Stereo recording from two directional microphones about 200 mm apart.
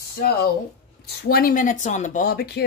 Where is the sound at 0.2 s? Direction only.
50° left (ahead or behind).